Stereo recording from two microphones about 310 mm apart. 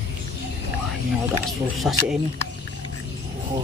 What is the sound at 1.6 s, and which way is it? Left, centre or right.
Speech, centre.